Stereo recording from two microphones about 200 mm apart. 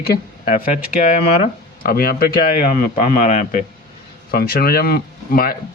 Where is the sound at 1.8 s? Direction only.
45° left (ahead or behind).